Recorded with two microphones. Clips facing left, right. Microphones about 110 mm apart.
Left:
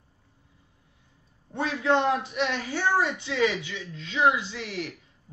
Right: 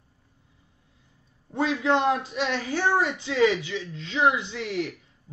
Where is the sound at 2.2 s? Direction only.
30° right (ahead or behind).